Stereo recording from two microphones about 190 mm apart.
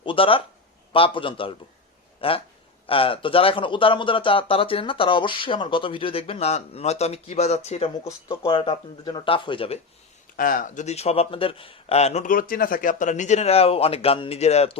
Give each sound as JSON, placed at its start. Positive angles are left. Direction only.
{"t": 0.0, "sound": "speech", "side_deg": 30}
{"t": 10.3, "sound": "a man's voice", "side_deg": 45}